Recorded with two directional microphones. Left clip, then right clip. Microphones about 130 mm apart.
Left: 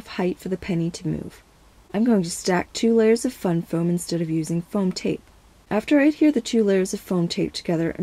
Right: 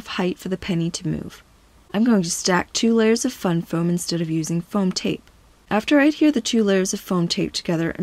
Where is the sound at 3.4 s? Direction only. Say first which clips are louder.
Right 1 dB; 30° right (ahead or behind).